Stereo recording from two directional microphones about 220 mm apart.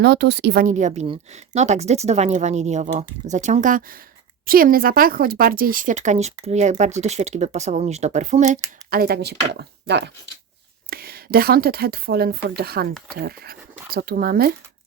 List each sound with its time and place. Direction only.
0.0 s a woman's voice: 50° right (ahead or behind); by 8.5 s 30° right (ahead or behind)
8.9 s a woman's voice: 45° right (ahead or behind)